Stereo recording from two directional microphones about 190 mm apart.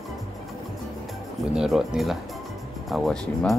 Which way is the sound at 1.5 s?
5° right (ahead or behind).